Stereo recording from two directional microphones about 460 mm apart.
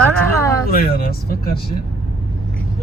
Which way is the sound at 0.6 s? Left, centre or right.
Centre.